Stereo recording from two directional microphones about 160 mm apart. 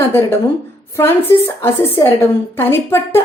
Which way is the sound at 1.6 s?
15° left (ahead or behind).